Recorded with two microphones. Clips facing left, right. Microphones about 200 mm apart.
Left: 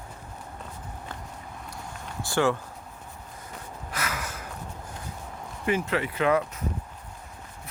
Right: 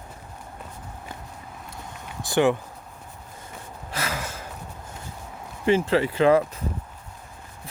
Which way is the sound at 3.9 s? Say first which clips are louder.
Right 3 dB; 30° right (ahead or behind).